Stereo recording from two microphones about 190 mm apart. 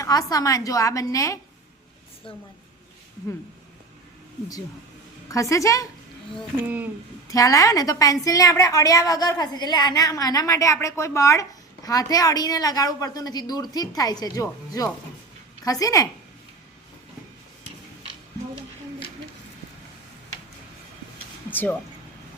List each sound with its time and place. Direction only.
0.0 s a woman's voice: 20° left (ahead or behind)
5.3 s a woman's voice: 15° left (ahead or behind)
7.3 s a woman's voice: 20° left (ahead or behind)
21.5 s speech: 10° left (ahead or behind)